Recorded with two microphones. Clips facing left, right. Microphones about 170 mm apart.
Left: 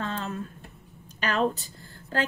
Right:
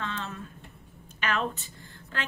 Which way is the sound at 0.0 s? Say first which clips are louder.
Left 4 dB; 40° left (ahead or behind).